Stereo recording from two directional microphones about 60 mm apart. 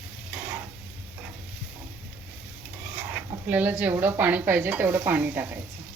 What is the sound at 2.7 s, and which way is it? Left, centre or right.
Speech, right.